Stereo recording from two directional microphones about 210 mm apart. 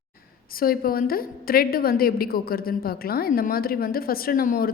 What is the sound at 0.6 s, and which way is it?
A woman's voice, 45° left (ahead or behind).